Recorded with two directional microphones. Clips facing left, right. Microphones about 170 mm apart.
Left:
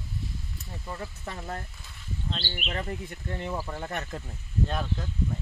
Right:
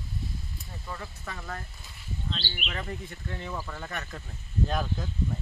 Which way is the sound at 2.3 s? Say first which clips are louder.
Left 2 dB; 45° left (ahead or behind).